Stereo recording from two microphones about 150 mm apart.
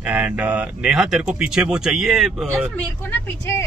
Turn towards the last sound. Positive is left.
turn(degrees=20)  # may be behind; listen again after turning